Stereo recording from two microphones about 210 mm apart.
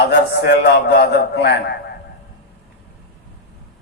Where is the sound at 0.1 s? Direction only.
55° left (ahead or behind).